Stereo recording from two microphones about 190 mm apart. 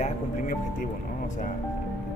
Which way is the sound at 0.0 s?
40° left (ahead or behind).